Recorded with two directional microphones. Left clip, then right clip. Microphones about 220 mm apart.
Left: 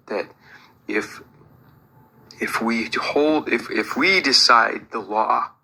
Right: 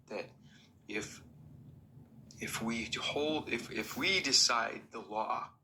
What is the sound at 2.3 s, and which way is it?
Speech, 35° left (ahead or behind).